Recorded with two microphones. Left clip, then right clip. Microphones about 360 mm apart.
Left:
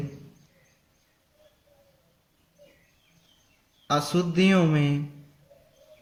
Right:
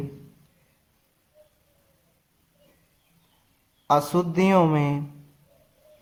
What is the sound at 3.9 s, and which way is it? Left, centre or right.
A man's voice, centre.